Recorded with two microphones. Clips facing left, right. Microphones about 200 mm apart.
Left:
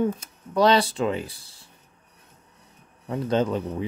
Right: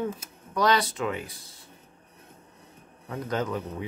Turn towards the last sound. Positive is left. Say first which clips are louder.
# left 6 dB
turn(degrees=30)  # may be behind; listen again after turning